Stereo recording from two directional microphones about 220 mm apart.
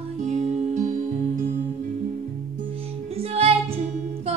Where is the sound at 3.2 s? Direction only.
25° right (ahead or behind).